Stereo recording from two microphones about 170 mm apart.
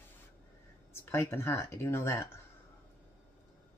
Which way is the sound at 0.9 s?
15° left (ahead or behind).